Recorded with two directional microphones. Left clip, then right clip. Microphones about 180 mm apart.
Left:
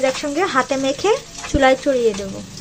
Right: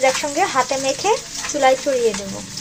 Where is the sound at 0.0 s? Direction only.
30° left (ahead or behind).